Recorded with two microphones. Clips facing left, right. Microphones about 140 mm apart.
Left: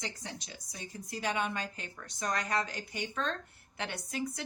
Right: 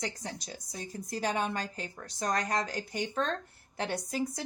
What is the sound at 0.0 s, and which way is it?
A woman's voice, 40° right (ahead or behind).